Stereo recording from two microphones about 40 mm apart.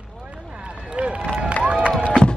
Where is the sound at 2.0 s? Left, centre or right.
Left.